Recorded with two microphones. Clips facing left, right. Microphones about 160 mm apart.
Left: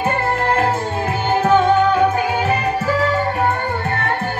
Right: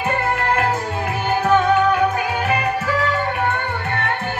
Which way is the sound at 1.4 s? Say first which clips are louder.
Left 2 dB; 25° left (ahead or behind).